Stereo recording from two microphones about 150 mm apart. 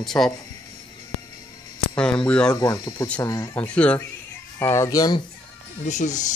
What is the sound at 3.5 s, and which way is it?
Speech, 10° left (ahead or behind).